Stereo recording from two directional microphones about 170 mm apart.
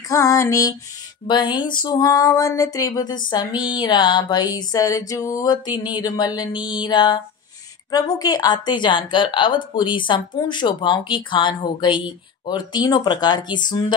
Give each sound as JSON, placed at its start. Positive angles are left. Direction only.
{"t": 0.1, "sound": "a woman's voice", "side_deg": 20}